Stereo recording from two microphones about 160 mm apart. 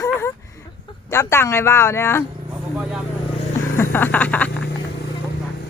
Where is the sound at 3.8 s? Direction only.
15° left (ahead or behind).